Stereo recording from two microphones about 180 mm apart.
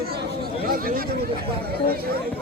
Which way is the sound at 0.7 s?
55° right (ahead or behind).